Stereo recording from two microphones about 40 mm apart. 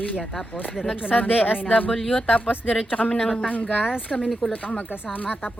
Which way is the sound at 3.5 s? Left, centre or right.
Left.